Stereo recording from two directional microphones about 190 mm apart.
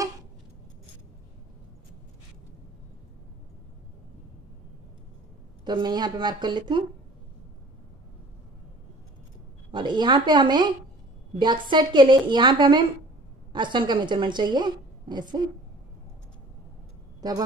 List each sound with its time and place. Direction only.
5.7 s a woman's voice: 20° right (ahead or behind)
9.7 s a woman's voice: 25° right (ahead or behind)
17.2 s a woman's voice: 20° right (ahead or behind)